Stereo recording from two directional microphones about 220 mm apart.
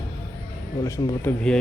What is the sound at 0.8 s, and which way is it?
Speech, 15° left (ahead or behind).